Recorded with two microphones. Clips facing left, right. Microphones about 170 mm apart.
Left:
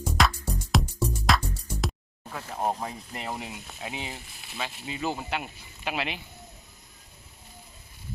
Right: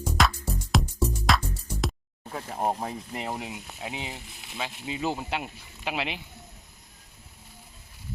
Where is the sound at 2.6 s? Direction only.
15° right (ahead or behind).